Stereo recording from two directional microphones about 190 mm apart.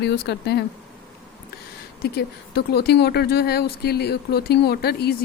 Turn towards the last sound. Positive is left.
turn(degrees=55)  # may be behind; listen again after turning